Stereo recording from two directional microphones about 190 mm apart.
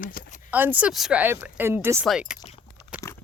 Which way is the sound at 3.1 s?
15° left (ahead or behind).